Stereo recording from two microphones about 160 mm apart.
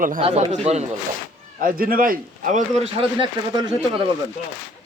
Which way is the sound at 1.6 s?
65° right (ahead or behind).